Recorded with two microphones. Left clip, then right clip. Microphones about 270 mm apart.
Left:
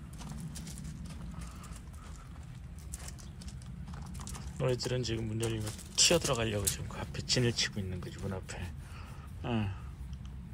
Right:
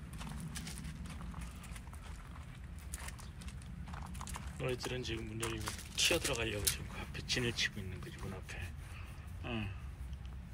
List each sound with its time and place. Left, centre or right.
4.6 s speech: centre